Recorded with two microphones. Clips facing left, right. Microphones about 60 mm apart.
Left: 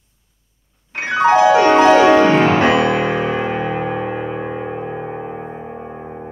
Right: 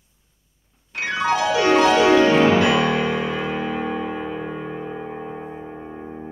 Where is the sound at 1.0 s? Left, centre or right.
Left.